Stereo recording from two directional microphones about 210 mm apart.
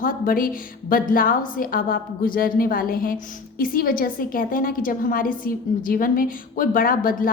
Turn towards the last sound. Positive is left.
turn(degrees=45)  # may be behind; listen again after turning